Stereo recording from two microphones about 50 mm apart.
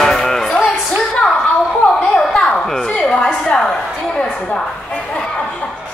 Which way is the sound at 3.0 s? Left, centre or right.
Centre.